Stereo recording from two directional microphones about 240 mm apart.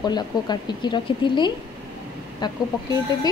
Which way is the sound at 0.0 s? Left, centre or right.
Centre.